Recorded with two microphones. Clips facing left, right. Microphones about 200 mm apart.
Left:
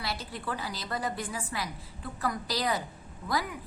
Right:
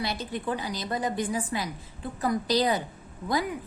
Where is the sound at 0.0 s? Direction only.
20° right (ahead or behind).